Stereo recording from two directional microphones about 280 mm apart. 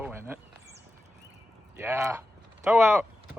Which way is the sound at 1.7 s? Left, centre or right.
Centre.